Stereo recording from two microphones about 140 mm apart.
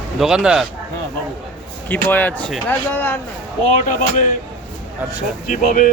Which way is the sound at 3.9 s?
70° left (ahead or behind).